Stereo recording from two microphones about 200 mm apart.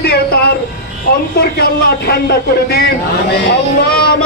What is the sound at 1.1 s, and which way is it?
Speech, 50° left (ahead or behind).